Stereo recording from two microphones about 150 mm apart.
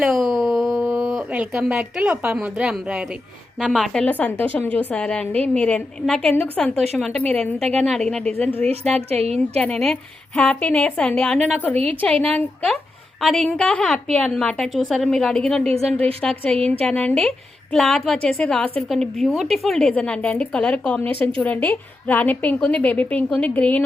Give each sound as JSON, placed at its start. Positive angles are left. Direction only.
{"t": 0.0, "sound": "a woman's voice", "side_deg": 0}
{"t": 8.7, "sound": "a woman's voice", "side_deg": -40}
{"t": 9.6, "sound": "a woman's voice", "side_deg": 5}